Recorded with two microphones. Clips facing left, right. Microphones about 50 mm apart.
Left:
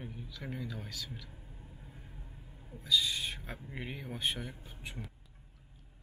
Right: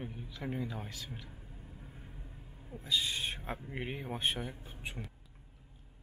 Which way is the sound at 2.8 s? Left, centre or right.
Right.